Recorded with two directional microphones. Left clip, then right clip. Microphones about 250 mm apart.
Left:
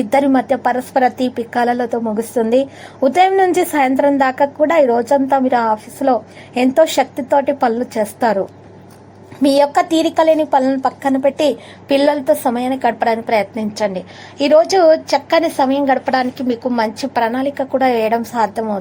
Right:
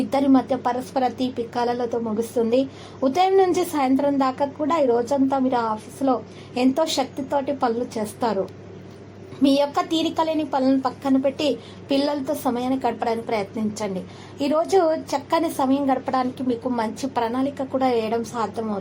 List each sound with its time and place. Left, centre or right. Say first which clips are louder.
0.1 s a woman's voice: left 7 dB; left
9.4 s a woman's voice: left 8 dB; left